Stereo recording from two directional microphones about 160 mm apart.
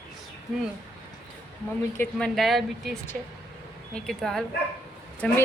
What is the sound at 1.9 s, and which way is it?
Speech, 10° left (ahead or behind).